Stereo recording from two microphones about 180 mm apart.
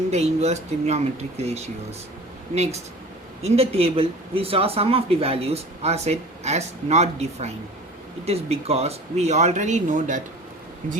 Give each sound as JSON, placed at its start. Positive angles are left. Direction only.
{"t": 0.1, "sound": "speech", "side_deg": -35}
{"t": 3.4, "sound": "speech", "side_deg": -35}